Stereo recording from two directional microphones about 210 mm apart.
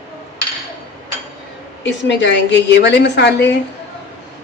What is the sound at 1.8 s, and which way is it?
A woman's voice, 60° left (ahead or behind).